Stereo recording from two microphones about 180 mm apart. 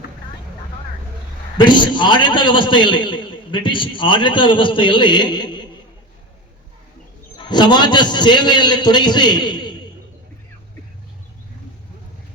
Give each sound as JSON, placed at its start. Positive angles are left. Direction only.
{"t": 1.5, "sound": "a man's voice", "side_deg": 25}
{"t": 7.3, "sound": "a man's voice", "side_deg": 25}